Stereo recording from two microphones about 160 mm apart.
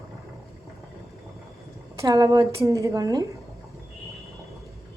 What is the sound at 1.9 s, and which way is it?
A woman's voice, 20° right (ahead or behind).